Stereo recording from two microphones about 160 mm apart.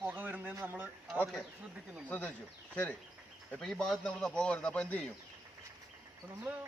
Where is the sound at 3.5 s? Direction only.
5° left (ahead or behind).